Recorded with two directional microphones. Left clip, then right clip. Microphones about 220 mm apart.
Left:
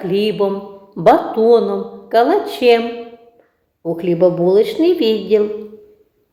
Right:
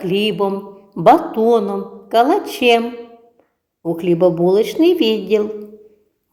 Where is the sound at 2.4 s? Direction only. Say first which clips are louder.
Left 1 dB; 5° left (ahead or behind).